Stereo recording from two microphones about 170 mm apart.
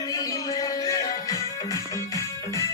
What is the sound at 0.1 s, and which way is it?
Music, 20° left (ahead or behind).